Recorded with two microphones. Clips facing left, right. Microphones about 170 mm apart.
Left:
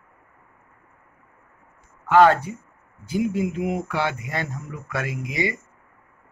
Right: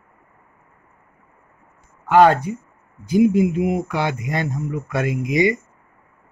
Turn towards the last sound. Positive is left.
turn(degrees=-15)  # may be behind; listen again after turning